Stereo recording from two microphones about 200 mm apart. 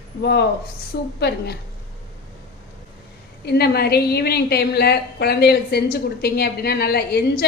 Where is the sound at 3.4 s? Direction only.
55° left (ahead or behind).